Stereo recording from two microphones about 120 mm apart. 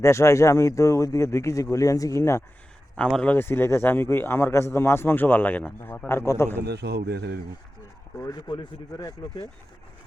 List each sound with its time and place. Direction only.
0.0 s speech: 25° left (ahead or behind)
2.9 s speech: 5° left (ahead or behind)
3.3 s speech: 20° left (ahead or behind)
8.2 s speech: 35° left (ahead or behind)